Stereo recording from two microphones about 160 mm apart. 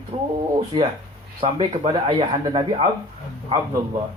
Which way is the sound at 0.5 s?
35° right (ahead or behind).